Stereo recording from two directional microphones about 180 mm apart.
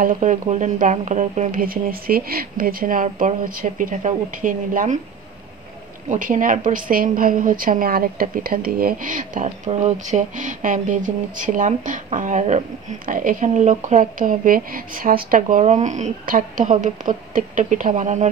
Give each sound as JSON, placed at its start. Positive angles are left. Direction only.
{"t": 0.0, "sound": "a woman's voice", "side_deg": -45}
{"t": 6.0, "sound": "a woman's voice", "side_deg": -45}